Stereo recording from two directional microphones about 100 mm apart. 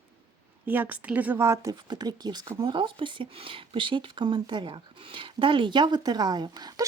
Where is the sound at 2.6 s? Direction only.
55° right (ahead or behind).